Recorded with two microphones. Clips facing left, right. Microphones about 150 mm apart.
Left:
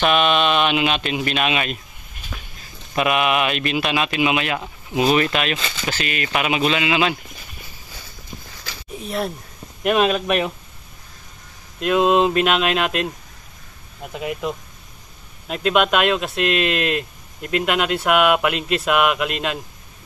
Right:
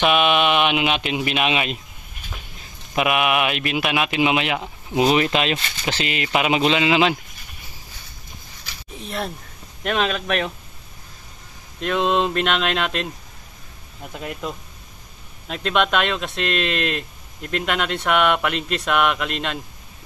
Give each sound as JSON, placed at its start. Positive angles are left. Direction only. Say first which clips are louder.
{"t": 0.0, "sound": "speech", "louder": "even", "side_deg": -10}
{"t": 2.9, "sound": "speech", "louder": "left 1 dB", "side_deg": -10}
{"t": 4.2, "sound": "speech", "louder": "even", "side_deg": -20}
{"t": 9.0, "sound": "speech", "louder": "left 3 dB", "side_deg": 0}
{"t": 11.8, "sound": "speech", "louder": "left 4 dB", "side_deg": 5}
{"t": 14.1, "sound": "speech", "louder": "left 4 dB", "side_deg": 5}